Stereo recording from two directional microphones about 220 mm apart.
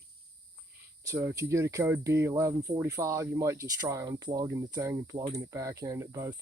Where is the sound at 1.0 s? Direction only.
15° right (ahead or behind).